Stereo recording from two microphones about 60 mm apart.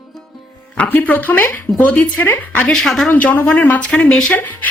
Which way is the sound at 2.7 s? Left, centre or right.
Centre.